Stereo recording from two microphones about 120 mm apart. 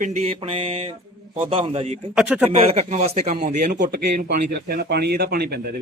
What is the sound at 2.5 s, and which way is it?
Speech, 60° right (ahead or behind).